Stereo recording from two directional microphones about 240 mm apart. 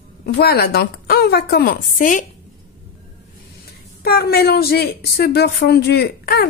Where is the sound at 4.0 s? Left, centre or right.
Left.